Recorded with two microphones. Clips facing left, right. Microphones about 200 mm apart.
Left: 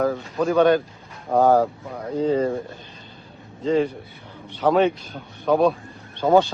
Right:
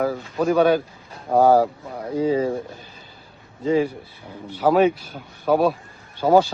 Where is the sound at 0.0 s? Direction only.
5° right (ahead or behind).